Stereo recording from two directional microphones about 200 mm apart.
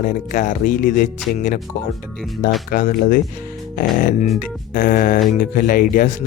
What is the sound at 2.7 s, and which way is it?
Speech, 50° left (ahead or behind).